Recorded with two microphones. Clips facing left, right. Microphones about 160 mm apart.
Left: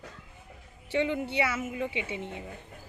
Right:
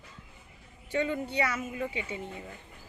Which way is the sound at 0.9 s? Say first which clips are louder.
Left 2 dB; 20° left (ahead or behind).